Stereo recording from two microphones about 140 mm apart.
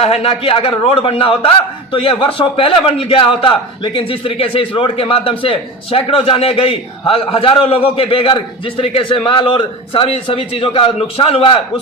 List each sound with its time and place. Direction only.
0.0 s a man's voice: 45° left (ahead or behind)